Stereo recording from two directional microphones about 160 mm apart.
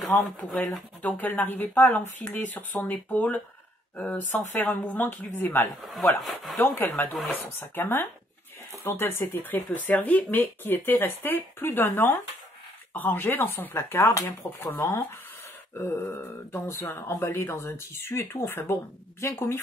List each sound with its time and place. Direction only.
0.5 s speech: 5° left (ahead or behind)
5.8 s speech: centre (ahead or behind)
6.6 s speech: 15° left (ahead or behind)